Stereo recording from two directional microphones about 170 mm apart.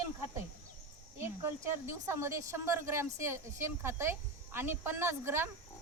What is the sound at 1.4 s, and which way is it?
Speech, 15° right (ahead or behind).